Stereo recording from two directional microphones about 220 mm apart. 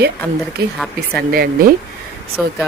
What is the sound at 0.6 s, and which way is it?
Speech, 45° right (ahead or behind).